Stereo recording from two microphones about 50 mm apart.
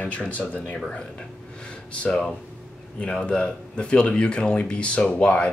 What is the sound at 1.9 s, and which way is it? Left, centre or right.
Speech, left.